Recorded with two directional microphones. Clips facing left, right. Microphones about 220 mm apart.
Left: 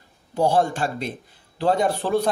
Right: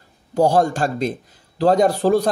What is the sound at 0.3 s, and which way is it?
Speech, 40° right (ahead or behind).